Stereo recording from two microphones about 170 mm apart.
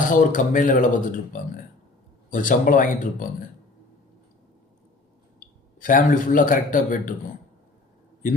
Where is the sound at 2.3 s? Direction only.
50° left (ahead or behind).